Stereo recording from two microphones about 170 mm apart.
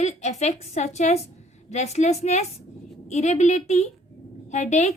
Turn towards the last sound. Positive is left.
turn(degrees=40)  # may be behind; listen again after turning